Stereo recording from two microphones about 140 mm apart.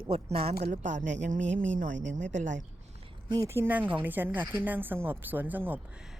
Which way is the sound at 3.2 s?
25° right (ahead or behind).